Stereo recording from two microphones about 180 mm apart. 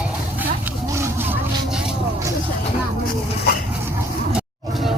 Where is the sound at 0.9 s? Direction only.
15° right (ahead or behind).